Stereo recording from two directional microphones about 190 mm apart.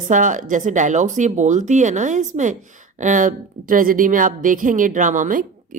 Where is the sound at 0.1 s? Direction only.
40° right (ahead or behind).